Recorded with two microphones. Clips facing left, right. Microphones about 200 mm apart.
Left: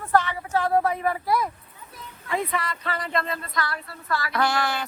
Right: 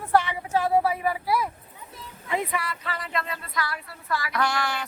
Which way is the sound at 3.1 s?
40° left (ahead or behind).